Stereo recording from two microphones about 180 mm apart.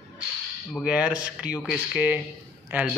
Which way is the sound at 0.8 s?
5° right (ahead or behind).